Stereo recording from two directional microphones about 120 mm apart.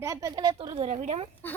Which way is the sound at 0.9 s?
65° right (ahead or behind).